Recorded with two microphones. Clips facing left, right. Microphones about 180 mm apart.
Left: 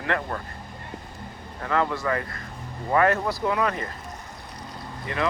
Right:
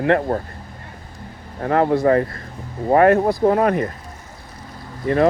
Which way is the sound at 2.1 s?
35° right (ahead or behind).